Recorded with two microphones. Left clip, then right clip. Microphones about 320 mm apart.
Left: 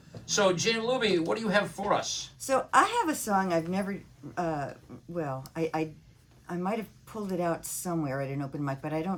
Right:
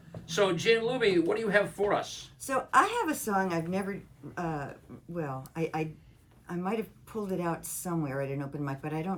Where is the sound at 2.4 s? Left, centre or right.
Centre.